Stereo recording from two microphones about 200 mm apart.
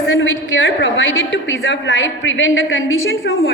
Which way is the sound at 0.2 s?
65° left (ahead or behind).